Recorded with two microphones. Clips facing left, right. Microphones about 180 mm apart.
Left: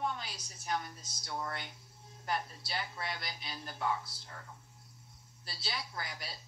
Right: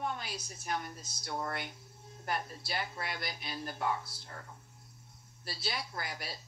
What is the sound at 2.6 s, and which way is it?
Speech, 55° right (ahead or behind).